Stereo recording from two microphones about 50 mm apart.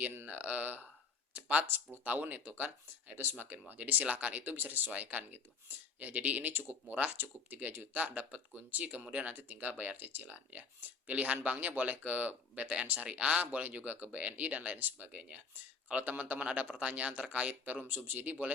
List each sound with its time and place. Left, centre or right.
0.3 s speech: right
17.8 s speech: right